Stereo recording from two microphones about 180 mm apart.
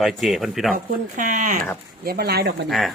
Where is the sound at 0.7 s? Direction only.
45° right (ahead or behind).